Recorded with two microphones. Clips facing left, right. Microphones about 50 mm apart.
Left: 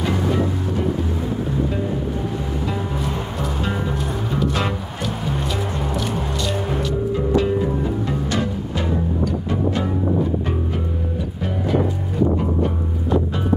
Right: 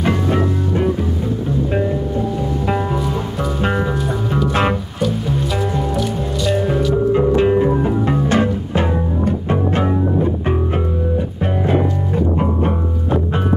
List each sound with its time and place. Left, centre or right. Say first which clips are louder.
4.5 s music: right 9 dB; right
5.9 s music: right 3 dB; centre
7.1 s music: right 5 dB; right